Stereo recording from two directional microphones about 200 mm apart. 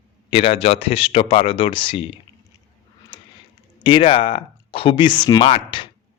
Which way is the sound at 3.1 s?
25° left (ahead or behind).